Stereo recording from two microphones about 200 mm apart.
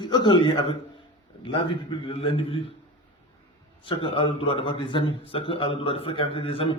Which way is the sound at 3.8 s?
25° left (ahead or behind).